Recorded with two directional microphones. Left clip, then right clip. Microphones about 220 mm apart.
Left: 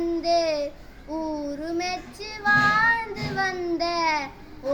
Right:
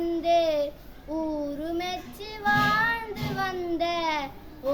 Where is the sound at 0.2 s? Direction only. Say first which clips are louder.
Right 1 dB; 5° right (ahead or behind).